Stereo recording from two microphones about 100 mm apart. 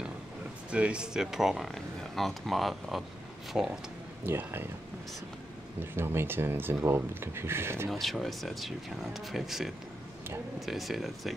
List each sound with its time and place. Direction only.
0.7 s speech: 10° right (ahead or behind)
4.3 s speech: 20° right (ahead or behind)
5.9 s speech: 20° right (ahead or behind)
7.9 s speech: centre (ahead or behind)